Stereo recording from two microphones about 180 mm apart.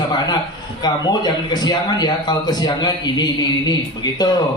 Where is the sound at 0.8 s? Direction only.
25° left (ahead or behind).